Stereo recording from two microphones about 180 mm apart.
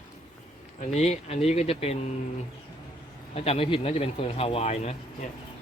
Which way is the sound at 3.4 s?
35° left (ahead or behind).